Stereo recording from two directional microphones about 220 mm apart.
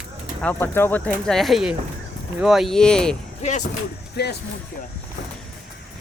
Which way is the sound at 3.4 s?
35° left (ahead or behind).